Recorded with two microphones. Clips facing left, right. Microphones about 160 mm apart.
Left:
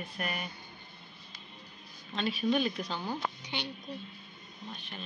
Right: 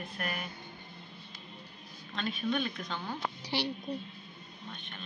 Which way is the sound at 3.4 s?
35° right (ahead or behind).